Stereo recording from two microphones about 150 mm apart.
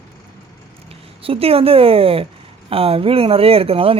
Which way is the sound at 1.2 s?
40° right (ahead or behind).